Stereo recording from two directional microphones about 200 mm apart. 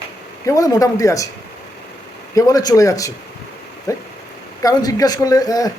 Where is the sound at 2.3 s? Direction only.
15° left (ahead or behind).